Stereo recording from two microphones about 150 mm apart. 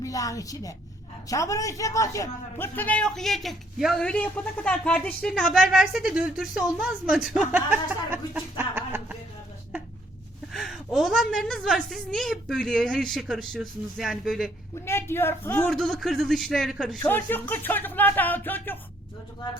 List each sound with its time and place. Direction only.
0.0 s a woman's voice: 25° left (ahead or behind); by 9.1 s 15° right (ahead or behind)
10.5 s a man's voice: centre (ahead or behind)
14.8 s a man's voice: 15° left (ahead or behind); by 17.0 s centre (ahead or behind)
17.1 s speech: 15° left (ahead or behind)